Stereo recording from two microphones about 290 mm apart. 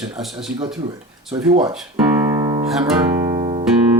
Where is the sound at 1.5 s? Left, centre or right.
Centre.